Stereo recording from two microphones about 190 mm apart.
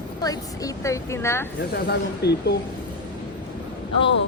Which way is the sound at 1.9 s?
60° left (ahead or behind).